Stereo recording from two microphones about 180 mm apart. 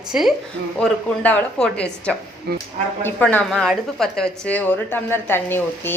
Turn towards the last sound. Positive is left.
turn(degrees=10)  # may be behind; listen again after turning